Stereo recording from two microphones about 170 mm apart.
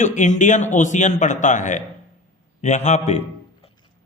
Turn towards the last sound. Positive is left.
turn(degrees=40)  # may be behind; listen again after turning